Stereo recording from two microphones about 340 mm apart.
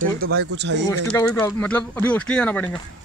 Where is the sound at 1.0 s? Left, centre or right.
Centre.